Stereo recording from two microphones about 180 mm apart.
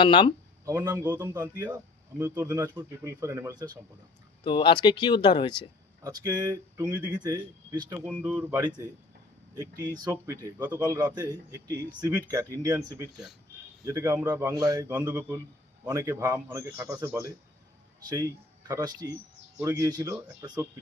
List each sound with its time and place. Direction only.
0.0 s speech: 25° left (ahead or behind)
0.6 s speech: 15° right (ahead or behind)
4.4 s speech: 25° left (ahead or behind)
6.0 s speech: 20° right (ahead or behind)
18.7 s speech: 20° right (ahead or behind)